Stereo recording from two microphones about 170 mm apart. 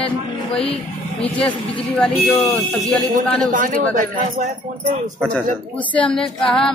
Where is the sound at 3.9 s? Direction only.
50° right (ahead or behind).